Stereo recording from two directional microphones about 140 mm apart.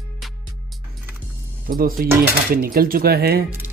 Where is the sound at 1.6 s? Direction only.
90° right.